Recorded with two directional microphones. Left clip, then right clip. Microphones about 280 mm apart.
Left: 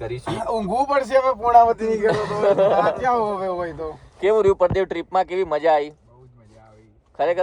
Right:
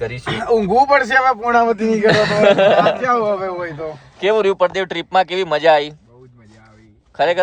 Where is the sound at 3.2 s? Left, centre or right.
Left.